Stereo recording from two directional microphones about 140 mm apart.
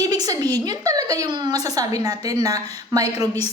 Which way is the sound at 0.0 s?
25° right (ahead or behind).